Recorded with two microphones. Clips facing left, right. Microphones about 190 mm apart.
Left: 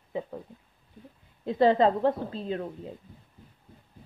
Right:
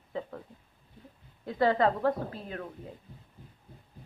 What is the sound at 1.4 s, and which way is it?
A woman's voice, 20° left (ahead or behind).